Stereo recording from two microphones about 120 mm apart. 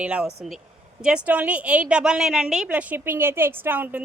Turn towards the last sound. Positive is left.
turn(degrees=-15)  # may be behind; listen again after turning